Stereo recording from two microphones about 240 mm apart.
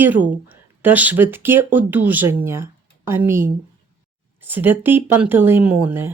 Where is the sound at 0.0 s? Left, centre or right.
Centre.